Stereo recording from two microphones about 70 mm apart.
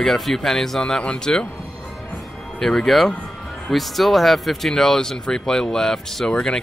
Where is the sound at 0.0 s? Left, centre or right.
Centre.